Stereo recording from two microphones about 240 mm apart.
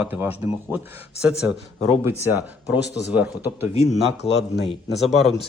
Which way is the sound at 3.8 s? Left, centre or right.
Left.